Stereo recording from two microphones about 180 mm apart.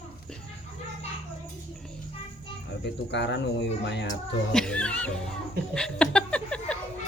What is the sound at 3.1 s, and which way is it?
Speech, 70° left (ahead or behind).